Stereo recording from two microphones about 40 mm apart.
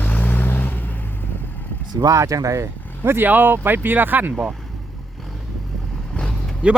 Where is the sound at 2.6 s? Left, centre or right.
Right.